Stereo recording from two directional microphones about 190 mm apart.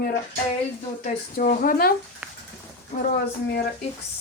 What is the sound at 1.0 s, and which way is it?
Speech, 45° left (ahead or behind).